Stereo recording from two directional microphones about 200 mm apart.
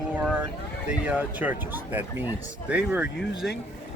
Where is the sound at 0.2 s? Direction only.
5° right (ahead or behind).